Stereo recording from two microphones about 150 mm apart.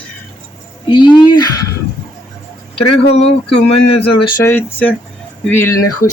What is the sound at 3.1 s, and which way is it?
Speech, 45° left (ahead or behind).